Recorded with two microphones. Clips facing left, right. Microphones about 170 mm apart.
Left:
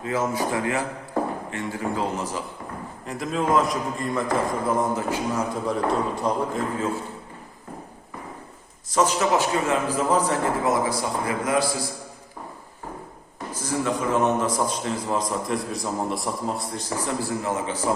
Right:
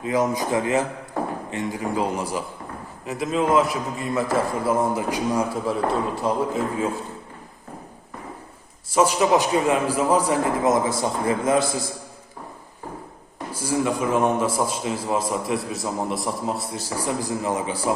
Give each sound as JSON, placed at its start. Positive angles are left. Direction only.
{"t": 0.0, "sound": "a man's voice", "side_deg": -15}
{"t": 5.9, "sound": "a man's voice", "side_deg": 0}
{"t": 6.7, "sound": "a man's voice", "side_deg": -10}
{"t": 8.9, "sound": "a man's voice", "side_deg": -10}
{"t": 13.5, "sound": "a man's voice", "side_deg": -10}